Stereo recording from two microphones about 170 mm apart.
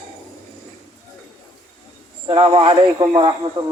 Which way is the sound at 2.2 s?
30° right (ahead or behind).